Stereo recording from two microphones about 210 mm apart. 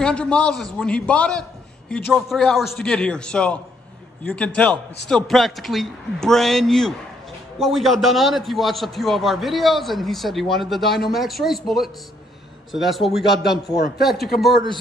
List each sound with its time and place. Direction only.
0.0 s a man's voice: 5° left (ahead or behind)
13.7 s speech: 45° left (ahead or behind)
14.0 s a man's voice: centre (ahead or behind)